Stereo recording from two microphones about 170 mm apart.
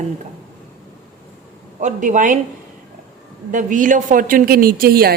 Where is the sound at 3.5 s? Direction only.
50° right (ahead or behind).